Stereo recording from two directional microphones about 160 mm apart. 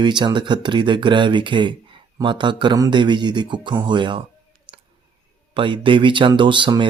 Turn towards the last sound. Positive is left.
turn(degrees=-30)  # may be behind; listen again after turning